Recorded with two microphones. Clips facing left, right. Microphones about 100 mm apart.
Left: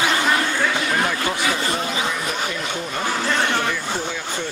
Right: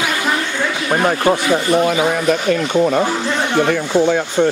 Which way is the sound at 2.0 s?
60° right (ahead or behind).